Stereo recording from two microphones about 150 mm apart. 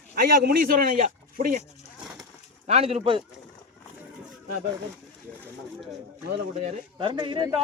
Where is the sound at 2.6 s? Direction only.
45° right (ahead or behind).